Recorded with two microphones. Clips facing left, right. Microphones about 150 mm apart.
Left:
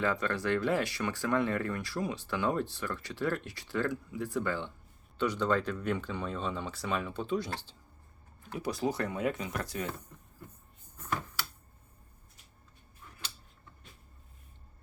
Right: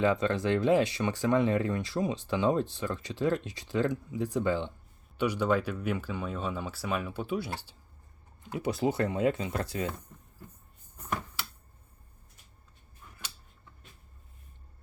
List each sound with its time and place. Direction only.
0.0 s speech: 20° right (ahead or behind)
8.4 s speech: 20° right (ahead or behind)